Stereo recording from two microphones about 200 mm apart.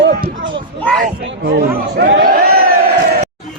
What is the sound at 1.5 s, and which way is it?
Speech, 50° right (ahead or behind).